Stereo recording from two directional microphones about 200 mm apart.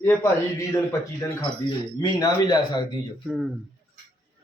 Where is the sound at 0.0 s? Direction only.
10° left (ahead or behind).